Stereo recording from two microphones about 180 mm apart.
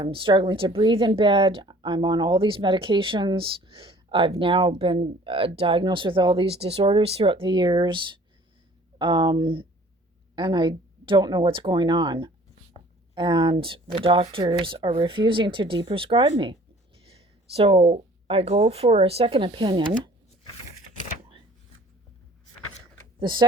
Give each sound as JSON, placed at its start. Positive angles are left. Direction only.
{"t": 0.0, "sound": "a woman's voice", "side_deg": -30}
{"t": 23.2, "sound": "a woman's voice", "side_deg": -25}